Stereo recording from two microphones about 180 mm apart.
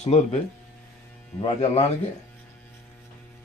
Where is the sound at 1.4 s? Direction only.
35° left (ahead or behind).